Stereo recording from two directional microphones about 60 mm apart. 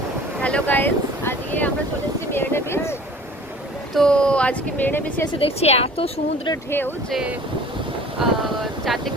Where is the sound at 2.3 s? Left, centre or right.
Left.